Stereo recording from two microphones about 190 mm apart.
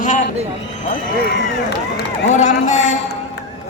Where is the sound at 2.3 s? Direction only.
40° left (ahead or behind).